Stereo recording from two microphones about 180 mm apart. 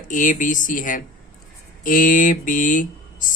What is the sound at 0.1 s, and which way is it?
Speech, 45° left (ahead or behind).